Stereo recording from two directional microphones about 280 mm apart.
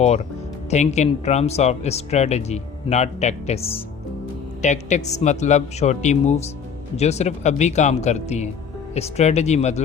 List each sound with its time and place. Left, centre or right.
0.0 s speech: left